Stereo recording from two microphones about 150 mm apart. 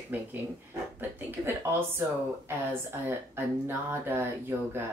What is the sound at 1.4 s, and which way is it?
Speech, 15° right (ahead or behind).